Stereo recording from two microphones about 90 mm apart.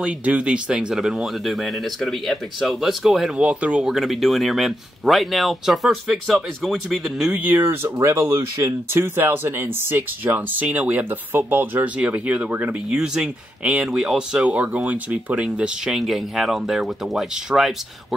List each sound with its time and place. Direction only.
0.0 s speech: 15° right (ahead or behind)
3.3 s speech: 15° right (ahead or behind)
7.3 s speech: 20° right (ahead or behind)
7.6 s speech: 30° right (ahead or behind); by 17.7 s 5° right (ahead or behind)